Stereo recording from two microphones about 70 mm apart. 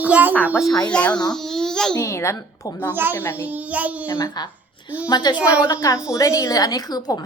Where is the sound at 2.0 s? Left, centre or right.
Left.